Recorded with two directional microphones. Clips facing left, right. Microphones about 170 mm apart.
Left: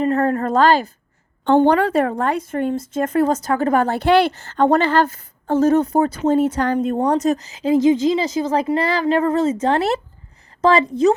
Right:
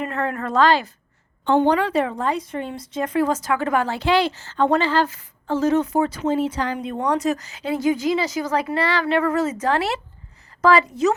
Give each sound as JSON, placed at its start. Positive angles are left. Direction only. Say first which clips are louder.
{"t": 0.0, "sound": "a woman's voice", "louder": "left 7 dB", "side_deg": 40}
{"t": 7.2, "sound": "speech", "louder": "left 4 dB", "side_deg": 35}
{"t": 7.9, "sound": "a woman's voice", "louder": "left 5 dB", "side_deg": 25}